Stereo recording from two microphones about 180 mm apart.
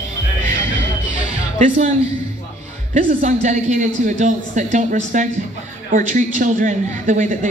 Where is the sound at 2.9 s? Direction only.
45° right (ahead or behind).